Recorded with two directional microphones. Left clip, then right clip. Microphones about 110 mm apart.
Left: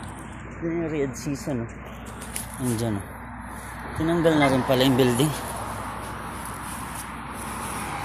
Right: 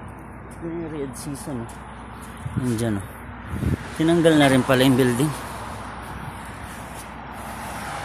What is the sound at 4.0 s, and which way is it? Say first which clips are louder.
Speech: right 4 dB; 90° right.